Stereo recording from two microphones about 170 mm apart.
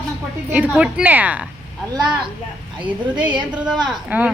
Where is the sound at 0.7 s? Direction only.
5° right (ahead or behind).